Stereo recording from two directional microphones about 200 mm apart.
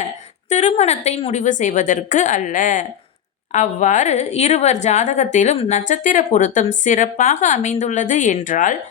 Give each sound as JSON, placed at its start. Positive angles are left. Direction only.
{"t": 0.5, "sound": "a woman's voice", "side_deg": 35}